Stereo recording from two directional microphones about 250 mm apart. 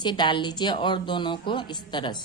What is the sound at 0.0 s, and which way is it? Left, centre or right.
Speech, centre.